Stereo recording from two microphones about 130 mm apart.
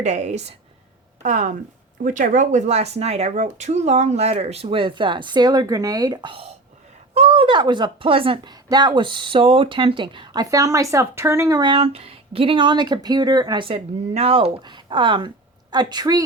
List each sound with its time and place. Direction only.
0.0 s speech: 65° right (ahead or behind)
1.2 s speech: 75° right (ahead or behind); by 6.3 s 30° right (ahead or behind)
7.1 s speech: 50° right (ahead or behind); by 11.7 s 25° right (ahead or behind)
11.7 s speech: 45° right (ahead or behind); by 16.2 s 30° right (ahead or behind)